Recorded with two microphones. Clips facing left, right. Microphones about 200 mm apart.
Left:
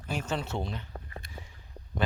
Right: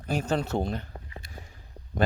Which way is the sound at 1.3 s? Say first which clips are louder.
Even; 45° right (ahead or behind).